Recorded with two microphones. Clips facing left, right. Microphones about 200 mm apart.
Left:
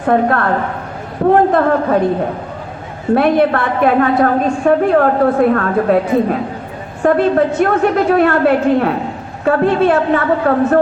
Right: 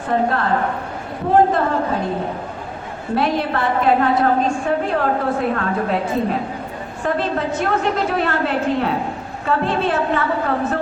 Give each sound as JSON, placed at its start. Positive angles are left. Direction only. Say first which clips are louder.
{"t": 0.0, "sound": "a woman's voice", "louder": "left 6 dB", "side_deg": 55}
{"t": 3.2, "sound": "a woman's voice", "louder": "left 7 dB", "side_deg": 55}
{"t": 7.0, "sound": "a woman's voice", "louder": "left 9 dB", "side_deg": 55}